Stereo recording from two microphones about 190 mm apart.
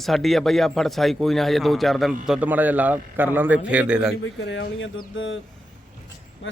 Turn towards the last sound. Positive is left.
turn(degrees=85)